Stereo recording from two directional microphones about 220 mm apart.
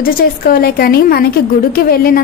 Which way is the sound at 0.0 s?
45° left (ahead or behind).